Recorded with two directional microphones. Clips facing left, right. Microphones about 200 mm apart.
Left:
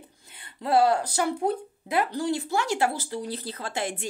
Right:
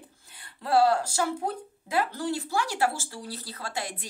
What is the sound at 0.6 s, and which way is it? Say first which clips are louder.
Speech: left 1 dB; 20° left (ahead or behind).